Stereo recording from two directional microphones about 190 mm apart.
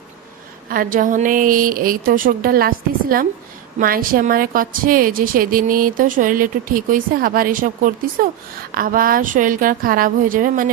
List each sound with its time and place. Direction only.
0.7 s a woman's voice: 45° right (ahead or behind)